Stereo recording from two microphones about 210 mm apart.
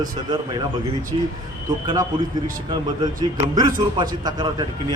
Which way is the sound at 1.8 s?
15° right (ahead or behind).